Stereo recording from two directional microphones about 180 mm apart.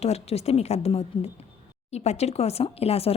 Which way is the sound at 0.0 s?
35° left (ahead or behind).